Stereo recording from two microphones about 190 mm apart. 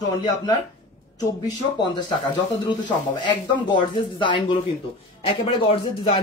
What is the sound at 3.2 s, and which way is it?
A man's voice, 25° left (ahead or behind).